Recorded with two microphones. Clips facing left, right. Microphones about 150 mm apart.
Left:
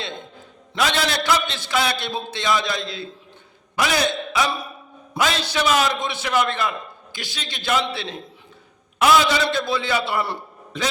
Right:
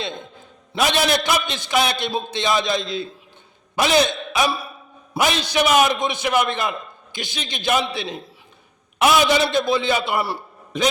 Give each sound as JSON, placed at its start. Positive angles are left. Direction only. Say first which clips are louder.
{"t": 0.8, "sound": "a man's voice", "louder": "right 3 dB", "side_deg": -20}